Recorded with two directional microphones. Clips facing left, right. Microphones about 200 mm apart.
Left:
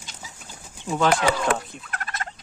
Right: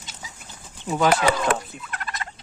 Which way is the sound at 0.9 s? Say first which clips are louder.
Right 1 dB; 10° right (ahead or behind).